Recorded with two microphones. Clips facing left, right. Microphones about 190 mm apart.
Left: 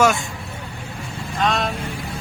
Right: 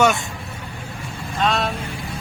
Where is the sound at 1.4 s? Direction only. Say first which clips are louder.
Even; centre (ahead or behind).